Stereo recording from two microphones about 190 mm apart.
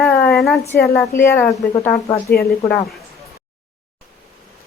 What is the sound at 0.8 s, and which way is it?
Speech, 15° left (ahead or behind).